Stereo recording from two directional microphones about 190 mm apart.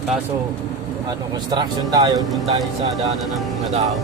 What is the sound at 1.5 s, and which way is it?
Speech, 20° right (ahead or behind).